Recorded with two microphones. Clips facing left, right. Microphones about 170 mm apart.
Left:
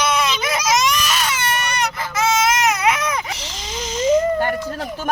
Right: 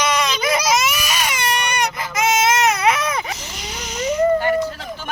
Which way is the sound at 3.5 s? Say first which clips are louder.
Even; 90° left.